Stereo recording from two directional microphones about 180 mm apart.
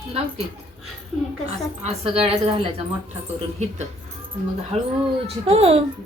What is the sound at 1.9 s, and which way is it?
Speech, 35° right (ahead or behind).